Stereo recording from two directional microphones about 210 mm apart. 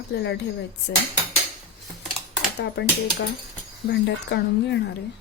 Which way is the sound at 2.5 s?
55° left (ahead or behind).